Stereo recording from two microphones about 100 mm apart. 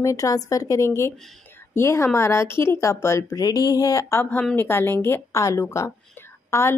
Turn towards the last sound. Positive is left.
turn(degrees=30)  # may be behind; listen again after turning